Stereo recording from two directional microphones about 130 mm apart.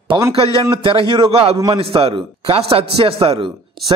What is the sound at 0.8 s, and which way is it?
Speech, 40° right (ahead or behind).